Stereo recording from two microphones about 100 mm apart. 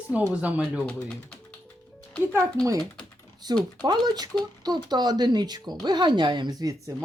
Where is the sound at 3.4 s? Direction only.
45° right (ahead or behind).